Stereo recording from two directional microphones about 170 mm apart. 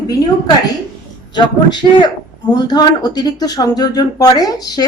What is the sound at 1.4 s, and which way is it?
Speech, 25° left (ahead or behind).